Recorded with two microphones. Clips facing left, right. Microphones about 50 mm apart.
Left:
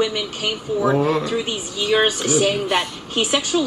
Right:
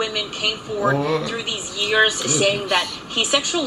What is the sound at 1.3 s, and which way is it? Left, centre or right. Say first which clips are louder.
A woman's voice: left 3 dB; right.